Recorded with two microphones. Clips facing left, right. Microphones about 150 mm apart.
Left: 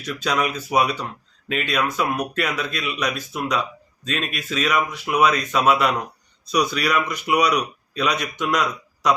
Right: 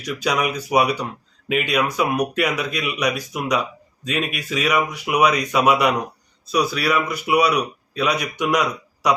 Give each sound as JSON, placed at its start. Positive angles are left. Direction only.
{"t": 0.0, "sound": "a man's voice", "side_deg": -10}